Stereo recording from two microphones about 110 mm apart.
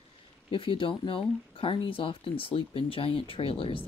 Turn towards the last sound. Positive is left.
turn(degrees=55)  # may be behind; listen again after turning